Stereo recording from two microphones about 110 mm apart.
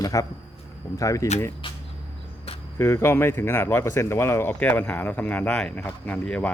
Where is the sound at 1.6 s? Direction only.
50° left (ahead or behind).